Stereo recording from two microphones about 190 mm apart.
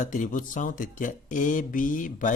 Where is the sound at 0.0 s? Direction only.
40° left (ahead or behind).